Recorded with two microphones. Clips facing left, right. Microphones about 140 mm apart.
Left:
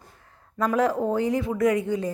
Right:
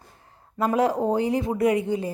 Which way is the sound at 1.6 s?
15° right (ahead or behind).